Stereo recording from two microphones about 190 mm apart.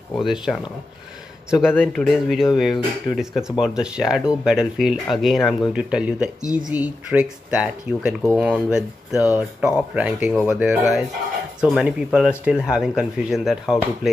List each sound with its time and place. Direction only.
0.1 s speech: centre (ahead or behind)
1.9 s speech: centre (ahead or behind)
9.1 s speech: 15° left (ahead or behind)
9.8 s speech: 5° right (ahead or behind)